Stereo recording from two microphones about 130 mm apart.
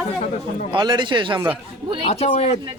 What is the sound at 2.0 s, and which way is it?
Speech, 50° left (ahead or behind).